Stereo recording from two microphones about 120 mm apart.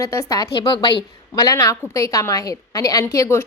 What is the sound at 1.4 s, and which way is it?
A woman's voice, 25° left (ahead or behind).